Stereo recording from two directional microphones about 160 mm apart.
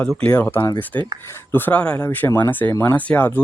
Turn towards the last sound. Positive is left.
turn(degrees=10)  # may be behind; listen again after turning